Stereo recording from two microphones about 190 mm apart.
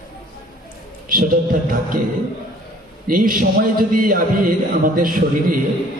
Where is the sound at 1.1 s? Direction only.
45° right (ahead or behind).